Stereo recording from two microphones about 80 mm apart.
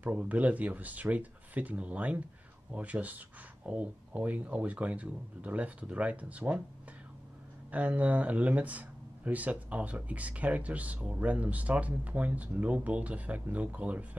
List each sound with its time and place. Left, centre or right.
0.0 s speech: centre
7.7 s speech: centre